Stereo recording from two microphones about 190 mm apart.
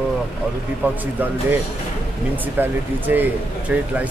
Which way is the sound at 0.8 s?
10° right (ahead or behind).